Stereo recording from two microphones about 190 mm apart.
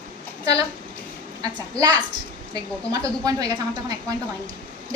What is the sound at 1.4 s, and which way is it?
A woman's voice, 20° right (ahead or behind).